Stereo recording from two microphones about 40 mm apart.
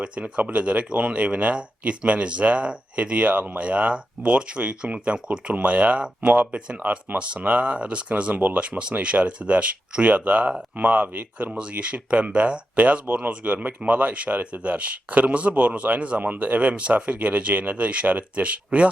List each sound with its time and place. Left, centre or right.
0.0 s speech: right
11.5 s speech: right
16.2 s speech: right